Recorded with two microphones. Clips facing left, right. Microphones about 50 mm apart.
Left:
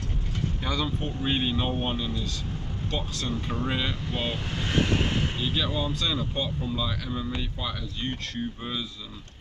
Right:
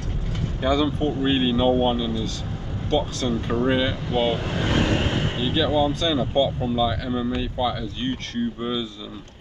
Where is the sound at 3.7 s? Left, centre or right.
Centre.